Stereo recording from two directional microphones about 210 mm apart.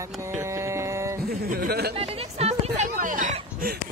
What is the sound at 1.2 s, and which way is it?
Speech, 45° right (ahead or behind).